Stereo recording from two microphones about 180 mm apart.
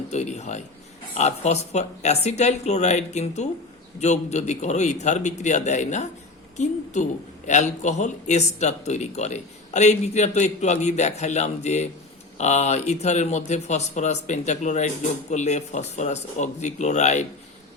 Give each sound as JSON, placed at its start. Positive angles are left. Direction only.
{"t": 0.1, "sound": "a man's voice", "side_deg": 40}